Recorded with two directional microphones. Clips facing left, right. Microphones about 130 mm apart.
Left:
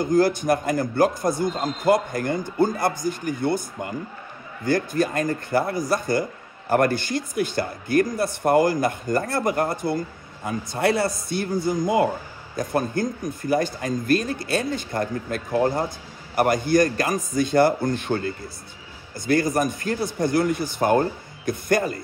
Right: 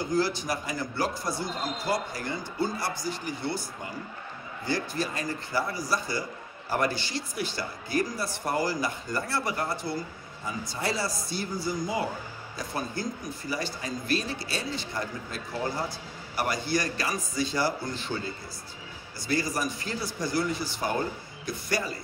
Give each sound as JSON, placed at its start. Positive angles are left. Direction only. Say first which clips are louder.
{"t": 0.0, "sound": "a man's voice", "louder": "left 8 dB", "side_deg": 50}